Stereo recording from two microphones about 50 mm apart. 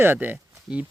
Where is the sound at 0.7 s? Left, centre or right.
Centre.